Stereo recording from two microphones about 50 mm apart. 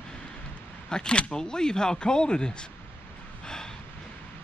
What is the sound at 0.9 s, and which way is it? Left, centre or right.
Speech, centre.